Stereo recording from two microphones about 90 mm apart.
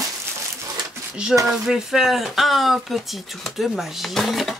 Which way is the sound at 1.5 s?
5° right (ahead or behind).